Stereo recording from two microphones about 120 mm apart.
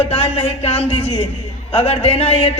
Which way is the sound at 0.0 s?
55° left (ahead or behind).